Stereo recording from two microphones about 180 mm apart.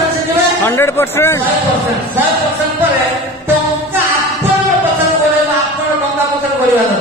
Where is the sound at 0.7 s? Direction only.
10° left (ahead or behind).